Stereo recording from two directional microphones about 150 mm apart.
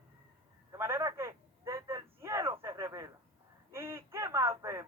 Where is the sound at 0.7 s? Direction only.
15° right (ahead or behind).